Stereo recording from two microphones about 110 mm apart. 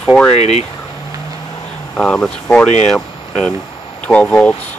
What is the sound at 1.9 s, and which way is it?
Speech, 10° left (ahead or behind).